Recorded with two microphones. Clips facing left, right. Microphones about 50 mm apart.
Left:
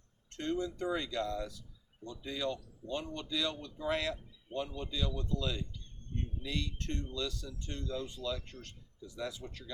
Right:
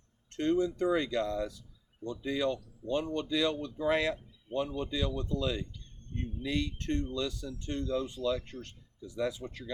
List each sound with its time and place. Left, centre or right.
0.3 s speech: right